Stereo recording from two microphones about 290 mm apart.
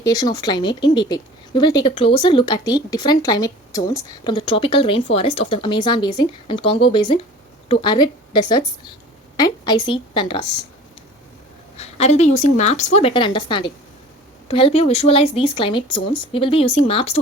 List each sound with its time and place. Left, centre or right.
0.0 s a woman's voice: centre
11.8 s speech: left